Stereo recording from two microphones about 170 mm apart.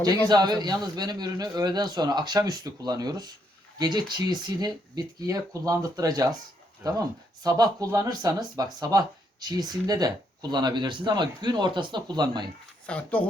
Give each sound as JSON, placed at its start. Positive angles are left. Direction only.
{"t": 0.3, "sound": "speech", "side_deg": -25}
{"t": 12.8, "sound": "speech", "side_deg": 5}